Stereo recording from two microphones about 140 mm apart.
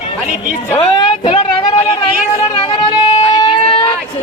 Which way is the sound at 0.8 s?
35° left (ahead or behind).